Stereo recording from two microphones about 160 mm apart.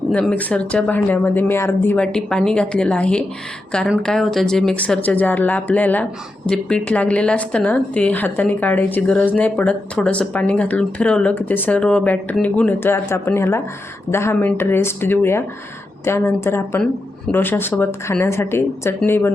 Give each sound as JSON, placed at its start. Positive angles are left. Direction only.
{"t": 0.1, "sound": "a woman's voice", "side_deg": 10}